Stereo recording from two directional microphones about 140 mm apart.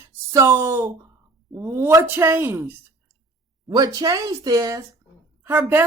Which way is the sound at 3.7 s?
30° right (ahead or behind).